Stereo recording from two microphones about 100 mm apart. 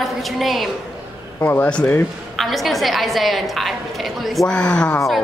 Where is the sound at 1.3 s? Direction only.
20° left (ahead or behind).